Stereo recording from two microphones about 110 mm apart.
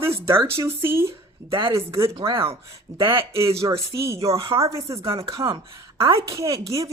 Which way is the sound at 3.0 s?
50° right (ahead or behind).